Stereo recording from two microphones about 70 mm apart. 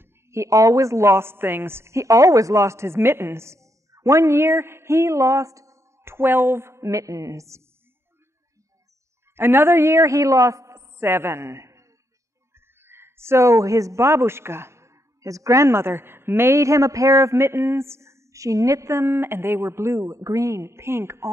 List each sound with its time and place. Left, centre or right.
0.0 s a woman's voice: right
6.0 s a woman's voice: right
9.3 s a man's voice: right